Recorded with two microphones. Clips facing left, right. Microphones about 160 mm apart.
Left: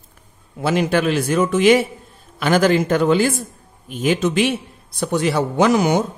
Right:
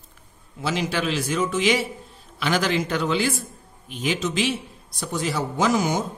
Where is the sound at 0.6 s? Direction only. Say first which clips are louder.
Left 7 dB; 55° left (ahead or behind).